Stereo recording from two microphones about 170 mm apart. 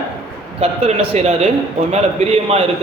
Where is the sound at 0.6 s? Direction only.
40° right (ahead or behind).